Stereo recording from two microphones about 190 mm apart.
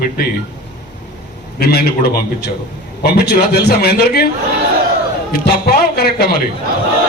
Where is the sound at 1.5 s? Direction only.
55° left (ahead or behind).